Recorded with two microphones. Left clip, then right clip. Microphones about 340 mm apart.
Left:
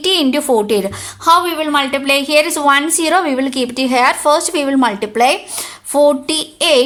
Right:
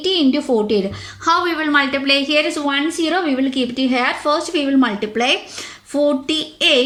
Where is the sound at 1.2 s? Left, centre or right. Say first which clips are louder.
Left 5 dB; centre.